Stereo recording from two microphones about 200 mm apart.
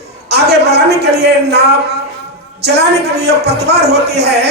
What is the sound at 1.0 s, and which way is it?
Speech, 55° right (ahead or behind).